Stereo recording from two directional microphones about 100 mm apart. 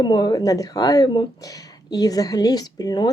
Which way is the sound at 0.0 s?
45° left (ahead or behind).